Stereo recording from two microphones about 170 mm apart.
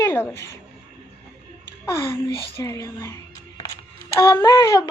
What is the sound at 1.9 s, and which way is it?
Speech, 15° left (ahead or behind).